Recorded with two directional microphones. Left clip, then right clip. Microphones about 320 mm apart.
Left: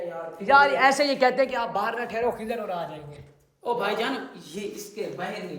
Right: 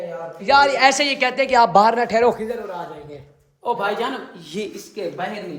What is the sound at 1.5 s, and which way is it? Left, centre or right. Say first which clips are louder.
Speech: right 13 dB; centre.